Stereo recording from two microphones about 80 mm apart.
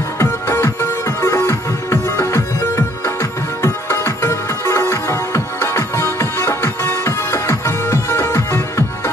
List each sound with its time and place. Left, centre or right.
0.2 s music: left